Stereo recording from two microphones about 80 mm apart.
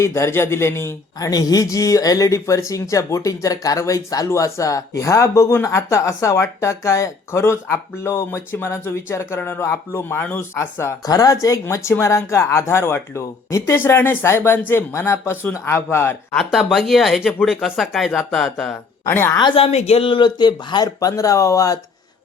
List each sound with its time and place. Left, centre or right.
0.0 s speech: left
1.2 s speech: left
11.0 s speech: left
11.6 s speech: left
16.3 s speech: centre
19.0 s speech: left
20.1 s speech: left
20.8 s speech: left